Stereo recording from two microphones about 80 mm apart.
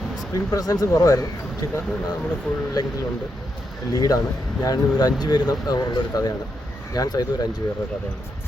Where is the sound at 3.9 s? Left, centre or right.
Left.